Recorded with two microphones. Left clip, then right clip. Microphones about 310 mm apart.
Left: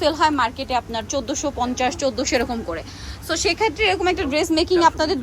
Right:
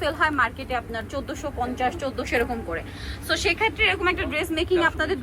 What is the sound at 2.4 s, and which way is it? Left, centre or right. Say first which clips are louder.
A woman's voice: left 2 dB; centre.